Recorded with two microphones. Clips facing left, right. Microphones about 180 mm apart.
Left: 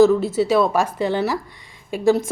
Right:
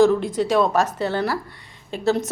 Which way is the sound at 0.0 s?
5° left (ahead or behind).